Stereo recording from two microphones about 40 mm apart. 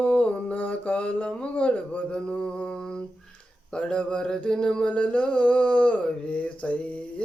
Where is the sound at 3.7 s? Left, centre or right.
Left.